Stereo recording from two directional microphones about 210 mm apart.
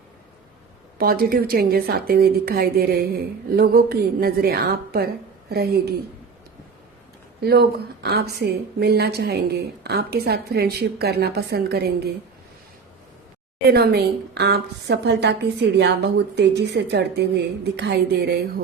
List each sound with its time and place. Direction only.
0.9 s a woman's voice: 45° right (ahead or behind)
7.4 s a woman's voice: 50° right (ahead or behind)
13.7 s a woman's voice: 50° right (ahead or behind)